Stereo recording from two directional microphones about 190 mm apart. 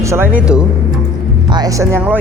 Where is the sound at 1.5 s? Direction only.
20° right (ahead or behind).